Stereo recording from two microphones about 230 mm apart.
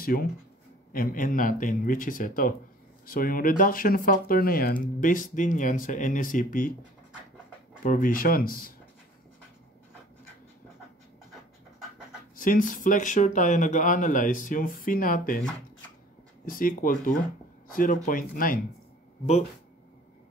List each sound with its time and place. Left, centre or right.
0.0 s speech: left
7.8 s speech: left
12.4 s speech: left
16.4 s speech: left